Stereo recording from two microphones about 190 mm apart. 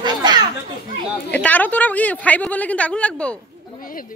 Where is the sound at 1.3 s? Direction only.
10° left (ahead or behind).